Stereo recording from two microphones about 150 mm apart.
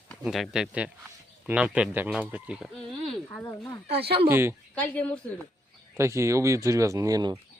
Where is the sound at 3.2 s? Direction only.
20° left (ahead or behind).